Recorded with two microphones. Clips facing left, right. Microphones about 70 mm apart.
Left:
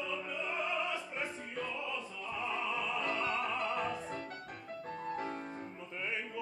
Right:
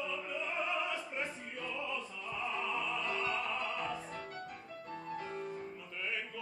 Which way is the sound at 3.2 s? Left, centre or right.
Centre.